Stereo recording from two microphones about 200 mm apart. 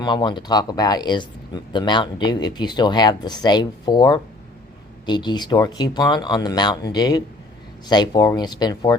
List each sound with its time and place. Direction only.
0.0 s speech: 25° left (ahead or behind)